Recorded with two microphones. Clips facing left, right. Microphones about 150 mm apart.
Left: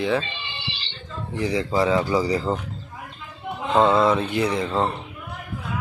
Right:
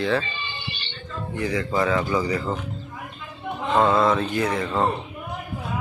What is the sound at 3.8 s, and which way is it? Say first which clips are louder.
Speech: left 2 dB; 20° left (ahead or behind).